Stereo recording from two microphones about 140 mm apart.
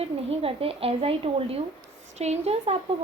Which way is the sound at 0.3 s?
45° right (ahead or behind).